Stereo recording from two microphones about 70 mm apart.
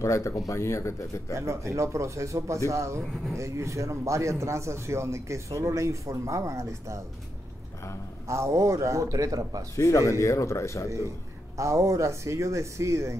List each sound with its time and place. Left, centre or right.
0.0 s speech: left
1.3 s a man's voice: right
8.3 s a man's voice: right
9.8 s speech: left
11.5 s a man's voice: right